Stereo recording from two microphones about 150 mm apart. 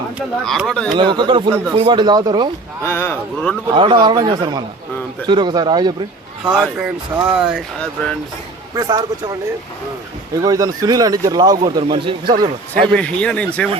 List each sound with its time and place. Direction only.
0.4 s speech: centre (ahead or behind)
0.9 s a man's voice: 30° right (ahead or behind)
2.8 s speech: 15° left (ahead or behind)
3.7 s a man's voice: 35° right (ahead or behind)
6.4 s speech: 10° right (ahead or behind)
8.7 s speech: 25° right (ahead or behind)
10.4 s a man's voice: 25° right (ahead or behind)
12.9 s speech: 10° left (ahead or behind)